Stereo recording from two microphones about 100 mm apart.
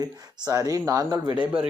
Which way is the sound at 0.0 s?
35° right (ahead or behind).